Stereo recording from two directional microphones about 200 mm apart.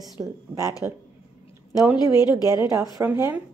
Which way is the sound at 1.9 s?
20° left (ahead or behind).